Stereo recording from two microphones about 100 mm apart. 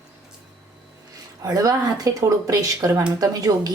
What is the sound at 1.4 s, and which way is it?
A woman's voice, 35° right (ahead or behind).